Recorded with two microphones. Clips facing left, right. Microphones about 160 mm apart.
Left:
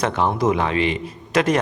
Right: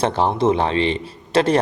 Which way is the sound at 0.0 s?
30° right (ahead or behind).